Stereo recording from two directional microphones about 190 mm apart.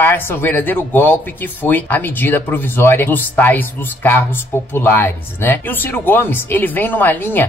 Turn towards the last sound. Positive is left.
turn(degrees=10)  # may be behind; listen again after turning